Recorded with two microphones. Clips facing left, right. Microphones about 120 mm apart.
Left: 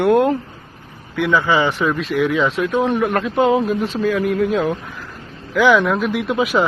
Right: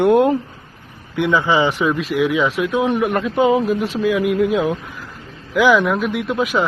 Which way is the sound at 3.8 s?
10° right (ahead or behind).